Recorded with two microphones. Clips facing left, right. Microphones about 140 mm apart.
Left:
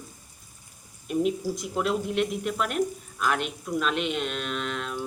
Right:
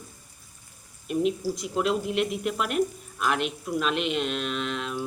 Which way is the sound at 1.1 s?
Centre (ahead or behind).